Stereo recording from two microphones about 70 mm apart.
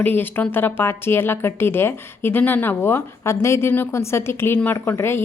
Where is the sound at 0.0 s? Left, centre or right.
Left.